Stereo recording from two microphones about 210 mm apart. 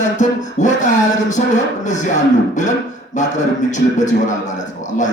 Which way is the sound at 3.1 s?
35° left (ahead or behind).